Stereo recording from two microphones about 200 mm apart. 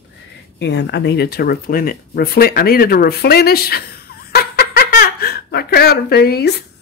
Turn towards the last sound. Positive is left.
turn(degrees=50)  # may be behind; listen again after turning